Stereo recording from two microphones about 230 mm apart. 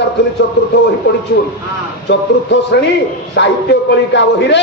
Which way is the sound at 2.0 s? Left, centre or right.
Left.